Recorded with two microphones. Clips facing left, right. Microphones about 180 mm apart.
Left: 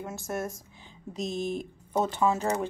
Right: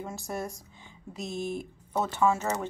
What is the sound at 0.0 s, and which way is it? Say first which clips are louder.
Speech: left 2 dB; centre (ahead or behind).